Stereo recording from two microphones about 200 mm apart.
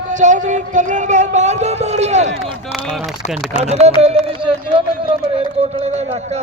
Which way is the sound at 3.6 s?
35° right (ahead or behind).